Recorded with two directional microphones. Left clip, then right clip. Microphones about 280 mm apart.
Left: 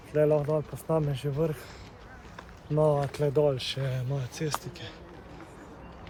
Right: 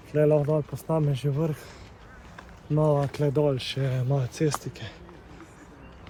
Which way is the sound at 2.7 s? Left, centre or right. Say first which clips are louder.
Right 1 dB; right.